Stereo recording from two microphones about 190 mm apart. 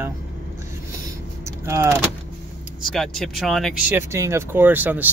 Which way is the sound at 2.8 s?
Centre (ahead or behind).